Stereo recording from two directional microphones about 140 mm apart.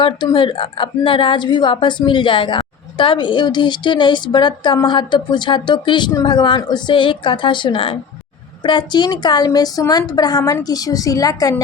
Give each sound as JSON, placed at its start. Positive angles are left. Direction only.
{"t": 0.0, "sound": "a woman's voice", "side_deg": 35}